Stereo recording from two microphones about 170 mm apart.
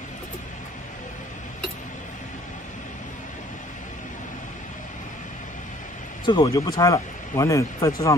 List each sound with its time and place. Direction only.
6.2 s speech: 25° left (ahead or behind)